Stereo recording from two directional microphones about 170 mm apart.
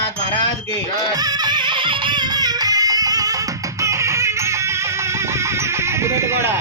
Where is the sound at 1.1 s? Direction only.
20° right (ahead or behind).